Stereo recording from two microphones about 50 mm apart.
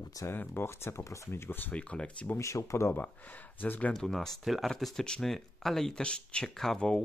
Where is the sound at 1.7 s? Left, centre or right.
Left.